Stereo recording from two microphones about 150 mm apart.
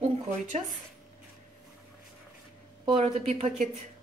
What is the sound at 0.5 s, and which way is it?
Speech, 50° right (ahead or behind).